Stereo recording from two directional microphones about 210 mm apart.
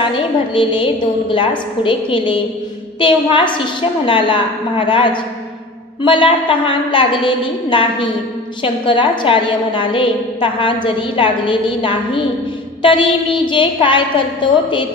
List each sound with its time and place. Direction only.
0.1 s a woman's voice: 25° left (ahead or behind)